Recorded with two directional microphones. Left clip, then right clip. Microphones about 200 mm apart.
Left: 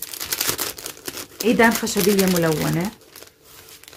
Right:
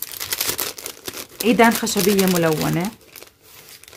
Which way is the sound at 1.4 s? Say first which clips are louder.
Right 1 dB; 35° right (ahead or behind).